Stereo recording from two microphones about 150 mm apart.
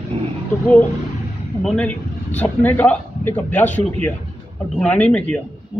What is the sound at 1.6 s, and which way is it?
Speech, 10° left (ahead or behind).